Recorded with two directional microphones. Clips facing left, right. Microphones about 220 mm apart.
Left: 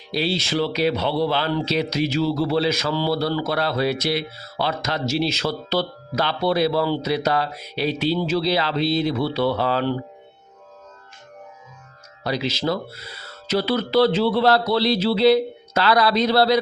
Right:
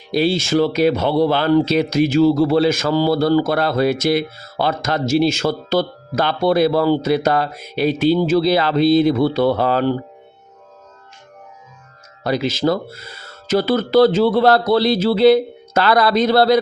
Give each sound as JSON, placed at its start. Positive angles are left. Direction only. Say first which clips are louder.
{"t": 0.1, "sound": "speech", "louder": "right 7 dB", "side_deg": -50}
{"t": 12.2, "sound": "speech", "louder": "right 6 dB", "side_deg": -50}